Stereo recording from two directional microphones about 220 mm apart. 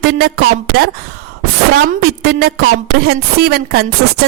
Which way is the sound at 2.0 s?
45° right (ahead or behind).